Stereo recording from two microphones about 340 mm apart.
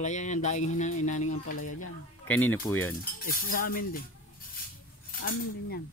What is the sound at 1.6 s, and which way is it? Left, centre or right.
Speech, left.